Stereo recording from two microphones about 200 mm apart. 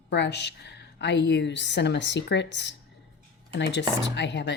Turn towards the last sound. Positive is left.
turn(degrees=60)  # may be behind; listen again after turning